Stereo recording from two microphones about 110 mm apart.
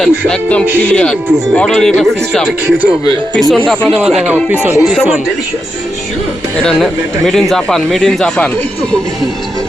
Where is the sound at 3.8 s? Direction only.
Centre (ahead or behind).